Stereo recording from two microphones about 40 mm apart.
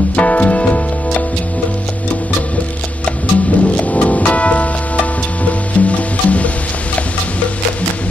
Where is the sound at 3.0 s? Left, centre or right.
Left.